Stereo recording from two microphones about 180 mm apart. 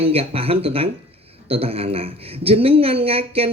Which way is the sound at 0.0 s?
30° right (ahead or behind).